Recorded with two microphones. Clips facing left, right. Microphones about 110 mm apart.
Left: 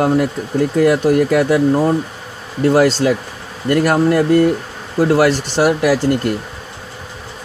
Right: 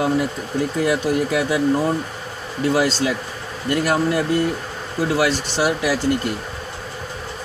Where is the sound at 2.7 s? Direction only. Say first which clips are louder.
Left 7 dB; 50° left (ahead or behind).